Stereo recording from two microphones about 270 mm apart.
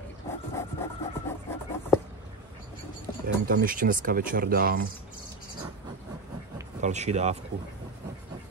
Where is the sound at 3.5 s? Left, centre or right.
Right.